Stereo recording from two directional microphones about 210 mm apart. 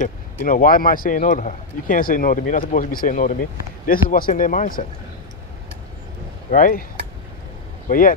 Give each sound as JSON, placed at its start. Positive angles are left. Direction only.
{"t": 0.0, "sound": "a man's voice", "side_deg": 40}
{"t": 6.5, "sound": "a man's voice", "side_deg": 40}
{"t": 7.9, "sound": "a man's voice", "side_deg": 40}